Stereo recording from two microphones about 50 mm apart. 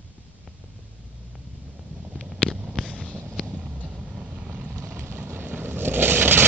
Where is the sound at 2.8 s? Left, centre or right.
Right.